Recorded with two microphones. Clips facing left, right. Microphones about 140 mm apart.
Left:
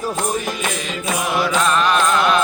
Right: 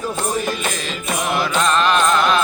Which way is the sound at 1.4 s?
10° left (ahead or behind).